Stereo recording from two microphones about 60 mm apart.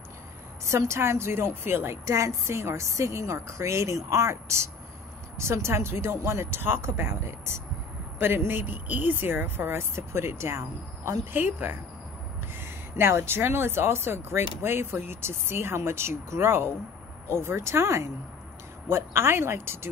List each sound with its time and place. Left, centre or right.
0.7 s speech: right
2.0 s a woman's voice: right
11.3 s speech: right